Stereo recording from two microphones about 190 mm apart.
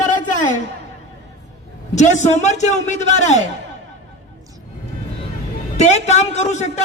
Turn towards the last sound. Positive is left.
turn(degrees=35)  # may be behind; listen again after turning